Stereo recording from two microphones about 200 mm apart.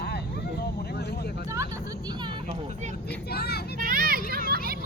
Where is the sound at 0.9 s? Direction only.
55° left (ahead or behind).